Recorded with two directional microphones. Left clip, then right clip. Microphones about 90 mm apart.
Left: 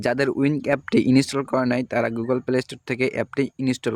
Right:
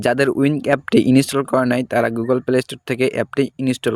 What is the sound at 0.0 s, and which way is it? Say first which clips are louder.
Speech: right 5 dB; 40° right (ahead or behind).